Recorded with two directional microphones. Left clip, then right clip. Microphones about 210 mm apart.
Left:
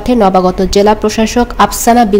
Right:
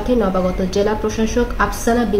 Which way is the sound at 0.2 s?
55° left (ahead or behind).